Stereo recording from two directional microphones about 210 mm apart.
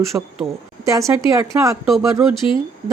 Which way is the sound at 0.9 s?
15° right (ahead or behind).